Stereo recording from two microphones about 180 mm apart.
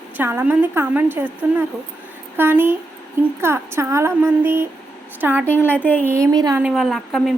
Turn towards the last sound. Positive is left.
turn(degrees=0)  # may be behind; listen again after turning